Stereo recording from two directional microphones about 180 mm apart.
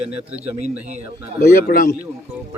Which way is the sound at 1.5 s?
55° left (ahead or behind).